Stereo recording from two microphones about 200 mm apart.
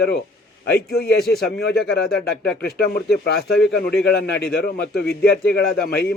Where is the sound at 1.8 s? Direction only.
55° left (ahead or behind).